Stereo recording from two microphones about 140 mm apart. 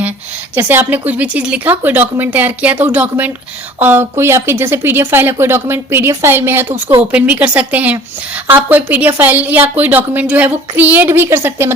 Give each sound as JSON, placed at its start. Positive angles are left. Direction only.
{"t": 0.5, "sound": "speech", "side_deg": -15}